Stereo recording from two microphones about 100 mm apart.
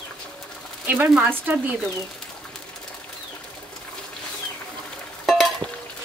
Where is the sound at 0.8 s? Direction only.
15° right (ahead or behind).